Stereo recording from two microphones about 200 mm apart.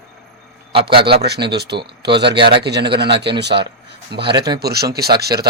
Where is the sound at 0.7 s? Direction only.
25° right (ahead or behind).